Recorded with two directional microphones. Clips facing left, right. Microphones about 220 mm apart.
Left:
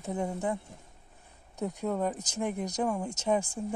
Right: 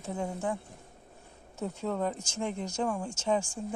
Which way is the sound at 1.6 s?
15° left (ahead or behind).